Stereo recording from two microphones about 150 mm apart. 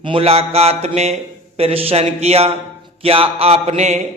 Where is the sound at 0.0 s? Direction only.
40° right (ahead or behind).